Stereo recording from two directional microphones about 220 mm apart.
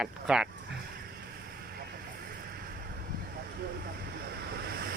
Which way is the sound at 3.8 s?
45° right (ahead or behind).